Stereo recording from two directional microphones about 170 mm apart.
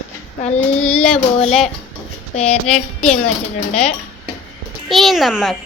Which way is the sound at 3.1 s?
45° left (ahead or behind).